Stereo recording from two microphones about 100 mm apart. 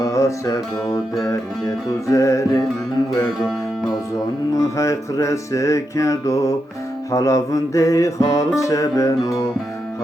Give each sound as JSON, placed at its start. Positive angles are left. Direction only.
{"t": 0.0, "sound": "music", "side_deg": 30}
{"t": 2.0, "sound": "music", "side_deg": 30}
{"t": 4.5, "sound": "music", "side_deg": 30}